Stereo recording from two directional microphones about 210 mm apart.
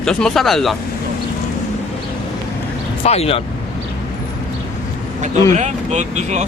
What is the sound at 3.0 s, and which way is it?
Speech, 30° left (ahead or behind).